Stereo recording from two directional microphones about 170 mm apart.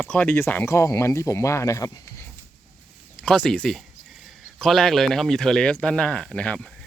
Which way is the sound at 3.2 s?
5° left (ahead or behind).